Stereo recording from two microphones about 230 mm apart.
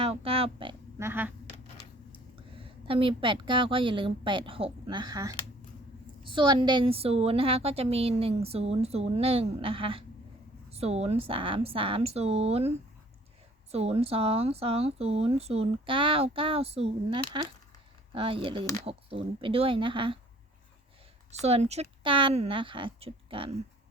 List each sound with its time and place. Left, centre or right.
0.0 s speech: right
2.6 s a woman's voice: right
21.4 s a woman's voice: right